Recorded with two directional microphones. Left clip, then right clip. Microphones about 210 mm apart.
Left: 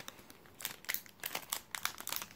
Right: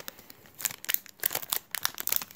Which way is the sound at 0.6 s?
35° right (ahead or behind).